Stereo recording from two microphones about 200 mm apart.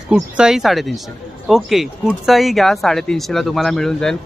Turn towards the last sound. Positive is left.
turn(degrees=5)  # may be behind; listen again after turning